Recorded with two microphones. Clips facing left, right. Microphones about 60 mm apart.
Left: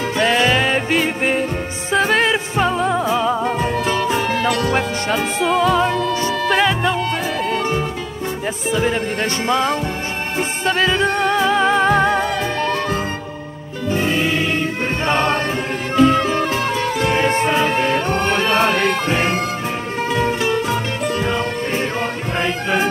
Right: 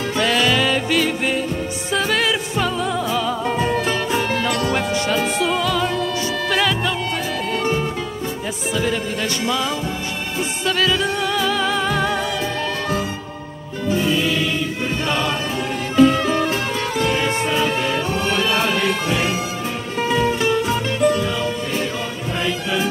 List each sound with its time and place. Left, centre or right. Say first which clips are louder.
0.2 s music: left 2 dB; left
4.4 s music: left 2 dB; left
8.7 s music: left 3 dB; left
17.0 s music: left 3 dB; left
21.2 s music: left 2 dB; left